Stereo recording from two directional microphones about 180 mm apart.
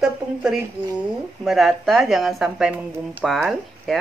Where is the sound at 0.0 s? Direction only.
5° right (ahead or behind).